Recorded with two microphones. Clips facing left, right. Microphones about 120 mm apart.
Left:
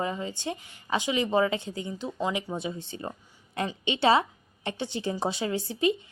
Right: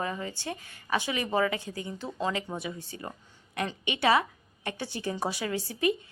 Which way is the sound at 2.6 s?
25° left (ahead or behind).